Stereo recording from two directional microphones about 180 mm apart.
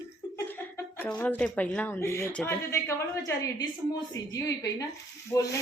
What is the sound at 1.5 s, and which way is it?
A woman's voice, 10° left (ahead or behind).